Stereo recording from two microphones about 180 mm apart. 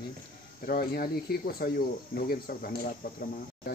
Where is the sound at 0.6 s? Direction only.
60° left (ahead or behind).